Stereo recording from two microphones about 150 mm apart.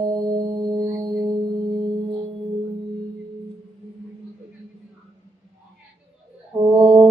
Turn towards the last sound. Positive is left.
turn(degrees=-30)  # may be behind; listen again after turning